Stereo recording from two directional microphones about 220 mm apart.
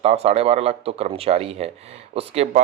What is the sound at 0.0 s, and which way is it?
Speech, 25° right (ahead or behind).